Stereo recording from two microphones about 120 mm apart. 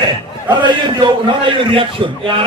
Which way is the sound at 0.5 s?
40° right (ahead or behind).